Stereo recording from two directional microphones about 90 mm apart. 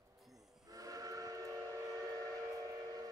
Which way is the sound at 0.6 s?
40° right (ahead or behind).